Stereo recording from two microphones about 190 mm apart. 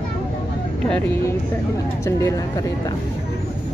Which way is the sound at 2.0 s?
15° left (ahead or behind).